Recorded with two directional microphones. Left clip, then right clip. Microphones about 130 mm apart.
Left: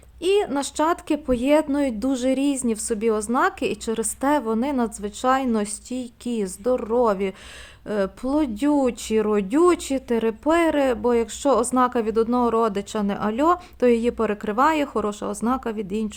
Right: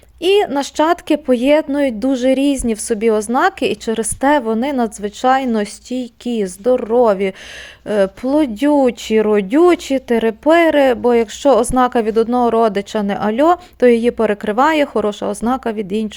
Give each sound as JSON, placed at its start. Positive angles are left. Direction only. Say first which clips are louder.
{"t": 0.2, "sound": "speech", "louder": "right 7 dB", "side_deg": -25}